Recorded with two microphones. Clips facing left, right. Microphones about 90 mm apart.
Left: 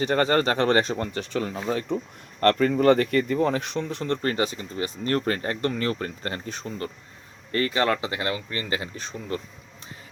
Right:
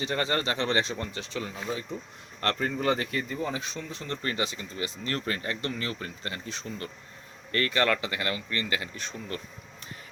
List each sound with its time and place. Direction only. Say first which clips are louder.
0.0 s speech: left 7 dB; 45° left (ahead or behind)
2.4 s speech: left 9 dB; 50° left (ahead or behind)
4.0 s speech: left 5 dB; 45° left (ahead or behind)
7.5 s speech: left 3 dB; 25° left (ahead or behind)